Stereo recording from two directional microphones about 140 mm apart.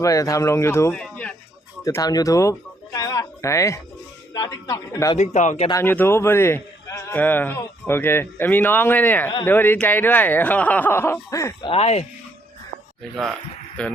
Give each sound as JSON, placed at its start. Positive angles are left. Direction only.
{"t": 0.0, "sound": "speech", "side_deg": 25}
{"t": 0.9, "sound": "a sound", "side_deg": 10}
{"t": 1.8, "sound": "speech", "side_deg": 25}
{"t": 5.1, "sound": "a man's voice", "side_deg": 55}
{"t": 5.7, "sound": "a man's voice", "side_deg": 15}
{"t": 11.6, "sound": "a man's voice", "side_deg": 45}
{"t": 13.8, "sound": "speech", "side_deg": 5}